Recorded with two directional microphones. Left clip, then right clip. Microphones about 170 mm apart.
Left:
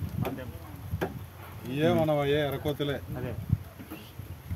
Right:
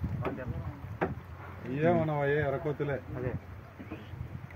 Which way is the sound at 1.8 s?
90° left.